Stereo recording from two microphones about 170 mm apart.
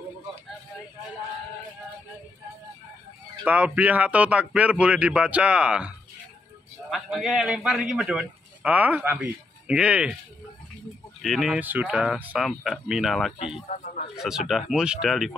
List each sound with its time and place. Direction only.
3.4 s speech: 10° right (ahead or behind)
6.9 s a man's voice: centre (ahead or behind)
11.1 s a man's voice: centre (ahead or behind)
13.7 s speech: 40° left (ahead or behind)
14.1 s a man's voice: 5° right (ahead or behind)